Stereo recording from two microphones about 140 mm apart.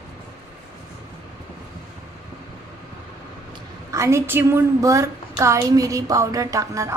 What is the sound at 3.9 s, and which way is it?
A woman's voice, 20° right (ahead or behind).